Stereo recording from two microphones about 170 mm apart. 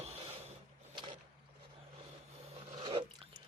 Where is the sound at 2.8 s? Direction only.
30° right (ahead or behind).